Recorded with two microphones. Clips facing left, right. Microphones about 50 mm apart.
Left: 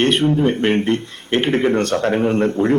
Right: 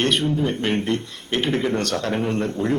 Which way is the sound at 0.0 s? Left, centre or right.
Left.